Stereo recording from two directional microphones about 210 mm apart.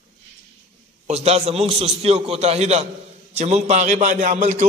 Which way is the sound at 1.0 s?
30° right (ahead or behind).